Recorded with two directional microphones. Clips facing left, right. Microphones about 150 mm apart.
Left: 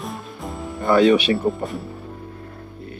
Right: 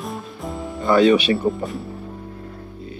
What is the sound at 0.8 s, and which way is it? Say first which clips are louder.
Speech: even; 55° left (ahead or behind).